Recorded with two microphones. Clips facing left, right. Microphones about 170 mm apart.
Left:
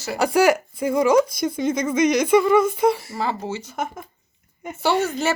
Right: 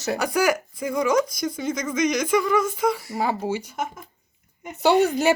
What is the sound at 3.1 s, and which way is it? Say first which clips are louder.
Speech: right 1 dB; 10° right (ahead or behind).